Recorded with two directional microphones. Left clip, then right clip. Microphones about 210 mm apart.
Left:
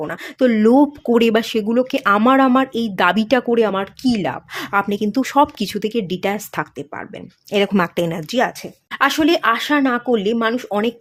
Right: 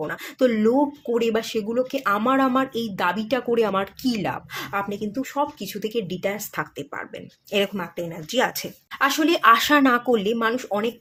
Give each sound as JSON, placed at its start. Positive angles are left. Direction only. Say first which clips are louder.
{"t": 0.0, "sound": "speech", "louder": "left 4 dB", "side_deg": 25}
{"t": 7.7, "sound": "speech", "louder": "left 11 dB", "side_deg": 45}
{"t": 8.3, "sound": "speech", "louder": "left 4 dB", "side_deg": 25}
{"t": 9.4, "sound": "speech", "louder": "right 1 dB", "side_deg": 10}